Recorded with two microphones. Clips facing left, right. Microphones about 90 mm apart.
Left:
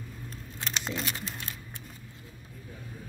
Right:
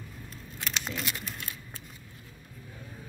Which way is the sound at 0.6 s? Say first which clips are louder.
Left 1 dB; 30° left (ahead or behind).